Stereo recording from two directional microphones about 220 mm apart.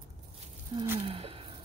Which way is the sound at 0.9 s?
25° right (ahead or behind).